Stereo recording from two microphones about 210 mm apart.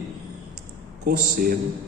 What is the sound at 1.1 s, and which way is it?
Speech, 40° right (ahead or behind).